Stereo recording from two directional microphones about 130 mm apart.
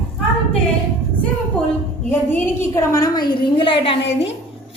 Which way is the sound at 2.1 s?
20° left (ahead or behind).